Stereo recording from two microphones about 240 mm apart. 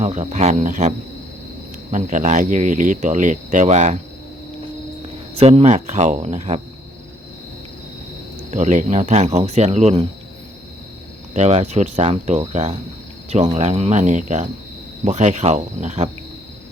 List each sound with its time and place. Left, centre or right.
0.0 s speech: right
5.4 s speech: right
8.4 s speech: right
11.3 s speech: right